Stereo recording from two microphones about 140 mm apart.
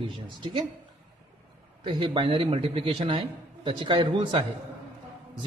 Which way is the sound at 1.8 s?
40° right (ahead or behind).